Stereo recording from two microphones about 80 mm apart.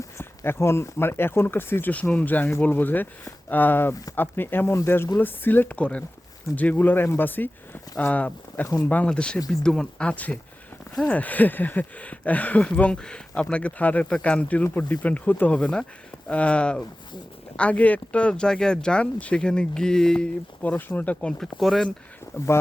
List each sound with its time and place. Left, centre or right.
0.2 s speech: left; by 20.2 s centre
20.6 s speech: left; by 21.8 s centre